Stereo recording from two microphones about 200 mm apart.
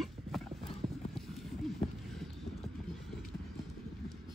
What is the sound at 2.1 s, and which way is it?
Vehicle, centre (ahead or behind).